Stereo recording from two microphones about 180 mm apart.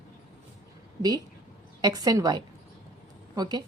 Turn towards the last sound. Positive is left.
turn(degrees=-25)  # may be behind; listen again after turning